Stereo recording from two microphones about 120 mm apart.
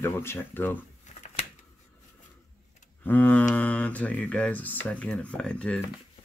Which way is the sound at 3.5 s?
10° left (ahead or behind).